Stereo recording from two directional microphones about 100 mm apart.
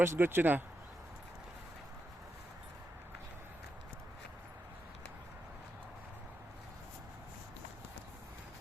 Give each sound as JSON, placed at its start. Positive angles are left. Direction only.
{"t": 0.0, "sound": "speech", "side_deg": -20}